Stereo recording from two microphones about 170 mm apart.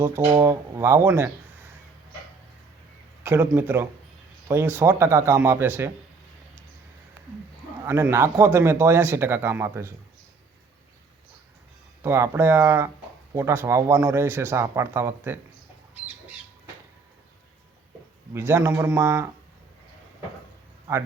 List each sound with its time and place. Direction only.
0.3 s speech: 15° right (ahead or behind)
3.2 s speech: 10° right (ahead or behind)
7.9 s speech: 15° right (ahead or behind)
12.0 s speech: 15° right (ahead or behind)
18.3 s speech: 15° right (ahead or behind)